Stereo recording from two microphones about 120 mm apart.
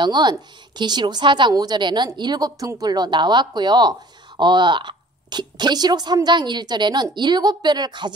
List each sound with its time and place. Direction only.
0.0 s a woman's voice: 35° right (ahead or behind)